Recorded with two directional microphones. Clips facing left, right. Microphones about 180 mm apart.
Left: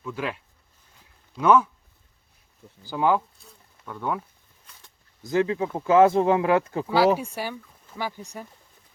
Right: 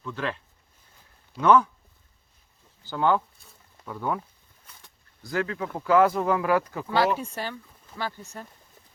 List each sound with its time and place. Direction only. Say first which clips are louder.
0.0 s speech: left 1 dB; 10° left (ahead or behind)
1.4 s speech: even; 5° left (ahead or behind)
2.8 s speech: left 1 dB; 10° left (ahead or behind)
5.2 s speech: left 6 dB; 20° left (ahead or behind)
6.8 s speech: left 4 dB; 5° left (ahead or behind)